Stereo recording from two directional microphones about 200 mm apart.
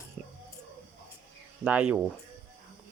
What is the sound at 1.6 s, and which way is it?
Speech, 5° right (ahead or behind).